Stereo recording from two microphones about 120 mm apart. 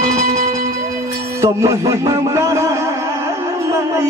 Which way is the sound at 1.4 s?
25° right (ahead or behind).